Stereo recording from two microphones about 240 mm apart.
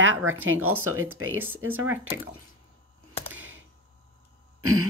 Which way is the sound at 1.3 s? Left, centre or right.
Centre.